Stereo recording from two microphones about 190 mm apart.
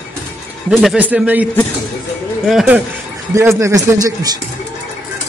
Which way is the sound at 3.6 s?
15° right (ahead or behind).